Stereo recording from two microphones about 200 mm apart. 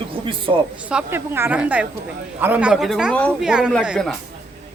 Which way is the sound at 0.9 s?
10° right (ahead or behind).